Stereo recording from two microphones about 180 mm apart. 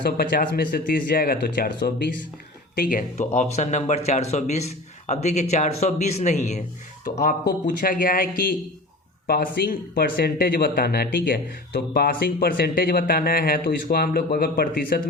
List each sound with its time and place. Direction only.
0.0 s speech: 60° left (ahead or behind)
2.7 s speech: 45° left (ahead or behind)